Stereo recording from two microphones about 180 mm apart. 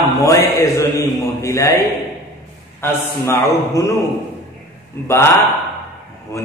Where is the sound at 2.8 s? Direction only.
15° left (ahead or behind).